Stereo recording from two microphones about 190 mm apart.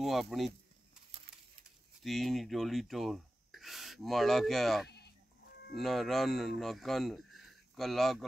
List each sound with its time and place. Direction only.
0.0 s speech: centre (ahead or behind)
2.0 s speech: centre (ahead or behind)
4.8 s sheep: 60° left (ahead or behind)
5.8 s speech: centre (ahead or behind)